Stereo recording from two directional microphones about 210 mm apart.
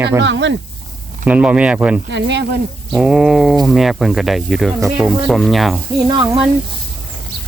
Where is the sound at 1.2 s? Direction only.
5° right (ahead or behind).